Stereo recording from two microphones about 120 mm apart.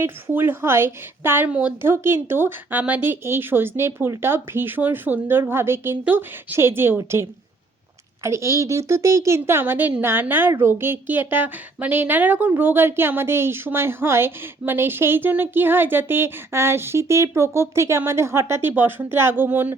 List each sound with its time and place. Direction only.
0.0 s speech: 20° right (ahead or behind)